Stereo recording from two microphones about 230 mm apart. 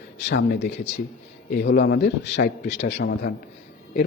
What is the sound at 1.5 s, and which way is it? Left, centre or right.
A man's voice, left.